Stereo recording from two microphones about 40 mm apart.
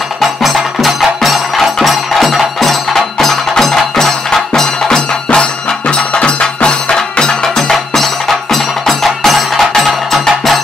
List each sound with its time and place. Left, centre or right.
0.2 s music: centre
5.3 s music: left
7.7 s music: centre